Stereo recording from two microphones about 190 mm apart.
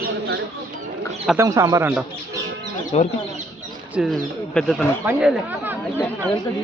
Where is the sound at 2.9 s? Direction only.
35° left (ahead or behind).